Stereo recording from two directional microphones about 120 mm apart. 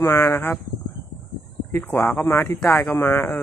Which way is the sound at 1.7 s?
15° left (ahead or behind).